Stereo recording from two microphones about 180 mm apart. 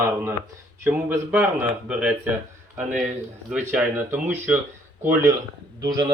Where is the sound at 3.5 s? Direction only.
5° right (ahead or behind).